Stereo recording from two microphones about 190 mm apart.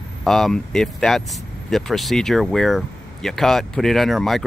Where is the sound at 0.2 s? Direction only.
Centre (ahead or behind).